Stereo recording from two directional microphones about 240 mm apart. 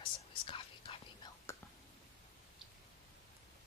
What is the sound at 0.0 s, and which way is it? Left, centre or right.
Whispering, left.